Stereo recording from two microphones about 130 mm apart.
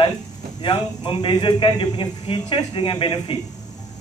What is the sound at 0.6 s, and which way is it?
A man's voice, 35° left (ahead or behind).